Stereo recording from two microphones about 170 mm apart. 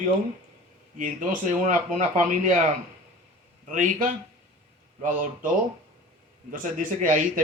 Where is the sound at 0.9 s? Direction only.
50° right (ahead or behind).